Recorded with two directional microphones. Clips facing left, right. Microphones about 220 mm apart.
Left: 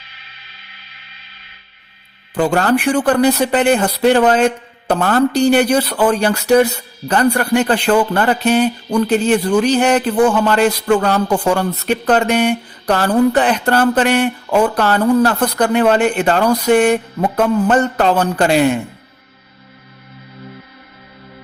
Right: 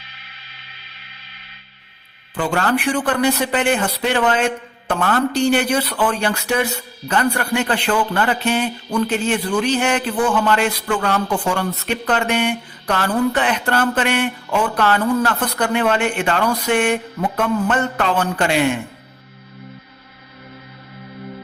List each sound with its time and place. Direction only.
2.3 s speech: 40° left (ahead or behind)